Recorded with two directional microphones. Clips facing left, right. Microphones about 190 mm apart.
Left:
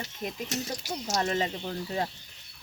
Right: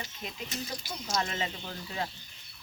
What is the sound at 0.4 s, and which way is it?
Speech, 75° left (ahead or behind).